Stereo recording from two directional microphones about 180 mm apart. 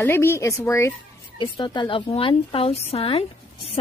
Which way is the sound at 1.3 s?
25° left (ahead or behind).